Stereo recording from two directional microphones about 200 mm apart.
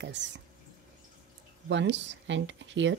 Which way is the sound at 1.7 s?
65° right (ahead or behind).